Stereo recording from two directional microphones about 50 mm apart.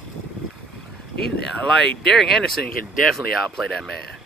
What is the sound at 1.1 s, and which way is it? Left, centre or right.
Speech, centre.